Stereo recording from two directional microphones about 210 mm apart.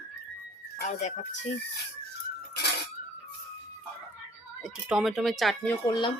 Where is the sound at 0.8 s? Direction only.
35° left (ahead or behind).